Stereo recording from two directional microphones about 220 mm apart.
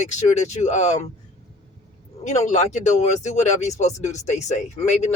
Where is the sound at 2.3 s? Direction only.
30° left (ahead or behind).